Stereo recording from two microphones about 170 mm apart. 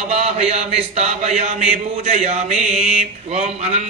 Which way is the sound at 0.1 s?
40° right (ahead or behind).